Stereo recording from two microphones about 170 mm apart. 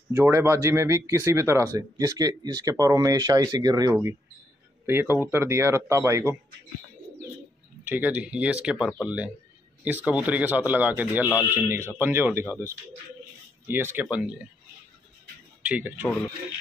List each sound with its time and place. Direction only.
0.1 s speech: 15° right (ahead or behind)
7.8 s speech: 10° right (ahead or behind)
13.7 s speech: 10° right (ahead or behind)
15.6 s speech: 10° right (ahead or behind)